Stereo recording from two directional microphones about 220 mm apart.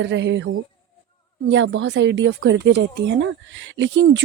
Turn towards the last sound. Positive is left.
turn(degrees=-55)  # may be behind; listen again after turning